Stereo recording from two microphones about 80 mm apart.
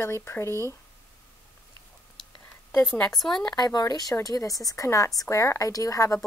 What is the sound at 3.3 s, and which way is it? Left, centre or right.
A woman's voice, left.